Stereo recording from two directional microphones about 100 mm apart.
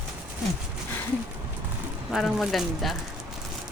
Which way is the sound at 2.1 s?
Centre (ahead or behind).